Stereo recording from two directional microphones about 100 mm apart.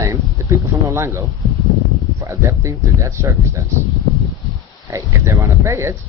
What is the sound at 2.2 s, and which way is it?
Speech, 30° right (ahead or behind).